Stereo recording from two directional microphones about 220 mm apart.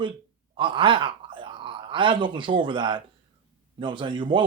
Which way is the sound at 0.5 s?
20° right (ahead or behind).